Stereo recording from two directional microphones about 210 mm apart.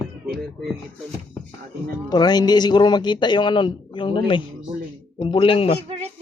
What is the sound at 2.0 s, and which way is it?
Speech, 20° left (ahead or behind).